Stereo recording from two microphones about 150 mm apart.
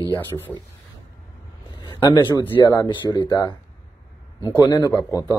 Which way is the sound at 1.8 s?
30° left (ahead or behind).